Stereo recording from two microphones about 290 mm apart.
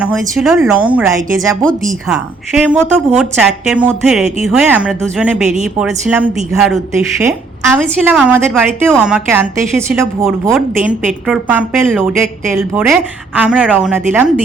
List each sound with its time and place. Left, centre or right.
0.0 s a woman's voice: centre
5.5 s a woman's voice: right
5.8 s a woman's voice: centre
7.8 s a woman's voice: centre